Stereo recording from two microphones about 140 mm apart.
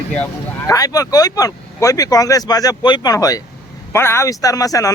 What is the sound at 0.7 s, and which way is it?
Speech, 25° left (ahead or behind).